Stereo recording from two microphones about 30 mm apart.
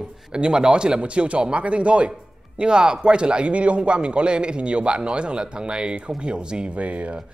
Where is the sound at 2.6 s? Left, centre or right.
Right.